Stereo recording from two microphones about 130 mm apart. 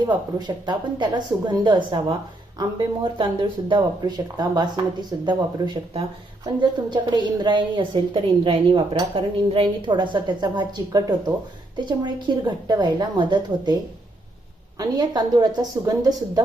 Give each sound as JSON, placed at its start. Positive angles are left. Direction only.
{"t": 0.0, "sound": "a woman's voice", "side_deg": -35}
{"t": 14.8, "sound": "a woman's voice", "side_deg": -30}